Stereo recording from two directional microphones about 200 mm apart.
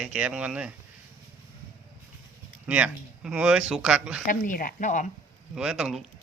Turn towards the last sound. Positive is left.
turn(degrees=0)  # may be behind; listen again after turning